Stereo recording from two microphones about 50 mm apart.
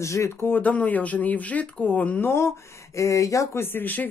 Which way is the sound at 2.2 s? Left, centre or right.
Left.